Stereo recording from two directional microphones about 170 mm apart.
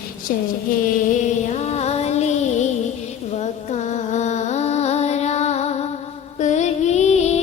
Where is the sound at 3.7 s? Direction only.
45° left (ahead or behind).